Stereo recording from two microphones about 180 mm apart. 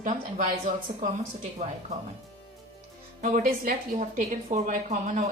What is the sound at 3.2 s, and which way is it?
A woman's voice, 45° right (ahead or behind).